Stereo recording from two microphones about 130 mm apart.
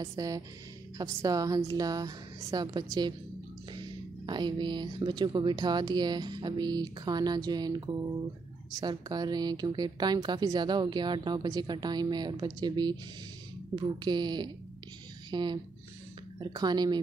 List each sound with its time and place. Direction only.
0.0 s a woman's voice: 25° right (ahead or behind)
4.3 s a woman's voice: 35° right (ahead or behind)